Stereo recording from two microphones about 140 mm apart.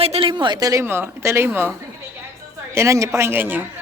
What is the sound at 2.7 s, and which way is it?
Speech, 20° right (ahead or behind).